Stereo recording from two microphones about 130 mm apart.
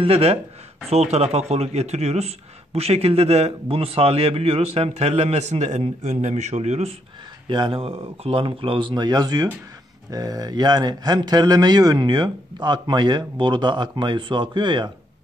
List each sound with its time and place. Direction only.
0.0 s speech: 50° right (ahead or behind)
7.4 s a man's voice: 40° right (ahead or behind)